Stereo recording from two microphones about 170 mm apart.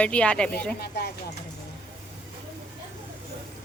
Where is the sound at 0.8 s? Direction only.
65° left (ahead or behind).